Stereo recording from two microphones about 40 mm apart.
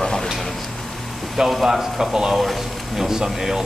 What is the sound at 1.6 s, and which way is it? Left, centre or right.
Speech, centre.